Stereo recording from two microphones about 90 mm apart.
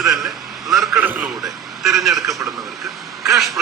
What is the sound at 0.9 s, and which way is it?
Speech, 20° right (ahead or behind).